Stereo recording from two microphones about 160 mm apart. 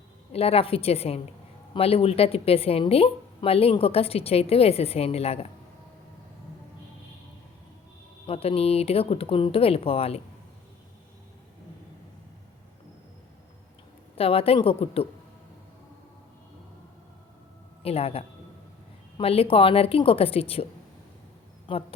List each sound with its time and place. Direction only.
0.3 s speech: 40° left (ahead or behind)
8.3 s speech: 40° left (ahead or behind)
14.2 s speech: 35° left (ahead or behind)
17.8 s speech: 40° left (ahead or behind)
21.7 s speech: 35° left (ahead or behind)